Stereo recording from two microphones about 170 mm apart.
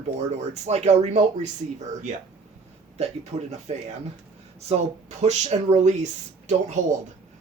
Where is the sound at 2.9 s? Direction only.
40° right (ahead or behind).